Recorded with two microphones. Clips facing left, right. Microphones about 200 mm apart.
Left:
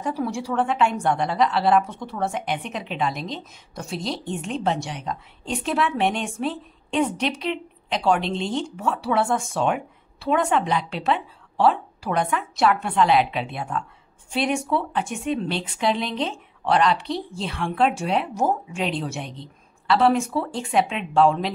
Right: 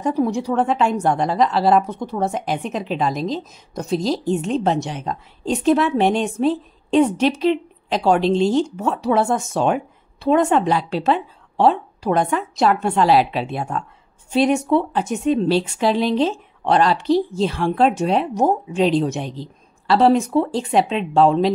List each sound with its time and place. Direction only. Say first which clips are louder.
0.0 s a woman's voice: right 7 dB; 40° right (ahead or behind)
4.0 s a woman's voice: right 7 dB; centre (ahead or behind)
4.5 s a woman's voice: right 5 dB; 40° right (ahead or behind)
19.2 s a woman's voice: right 7 dB; centre (ahead or behind)
19.9 s a woman's voice: right 4 dB; 35° right (ahead or behind)